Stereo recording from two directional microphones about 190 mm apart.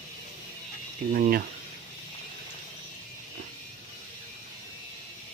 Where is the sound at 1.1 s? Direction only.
45° right (ahead or behind).